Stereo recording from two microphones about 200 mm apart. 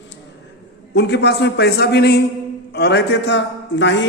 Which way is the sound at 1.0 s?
55° left (ahead or behind).